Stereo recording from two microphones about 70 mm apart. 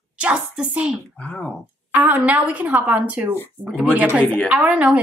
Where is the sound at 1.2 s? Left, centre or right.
Centre.